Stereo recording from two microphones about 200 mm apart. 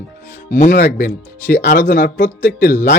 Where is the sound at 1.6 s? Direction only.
50° left (ahead or behind).